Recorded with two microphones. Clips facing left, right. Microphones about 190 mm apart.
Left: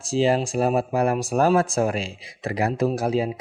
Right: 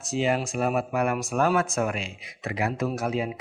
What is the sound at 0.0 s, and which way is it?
Speech, 30° left (ahead or behind).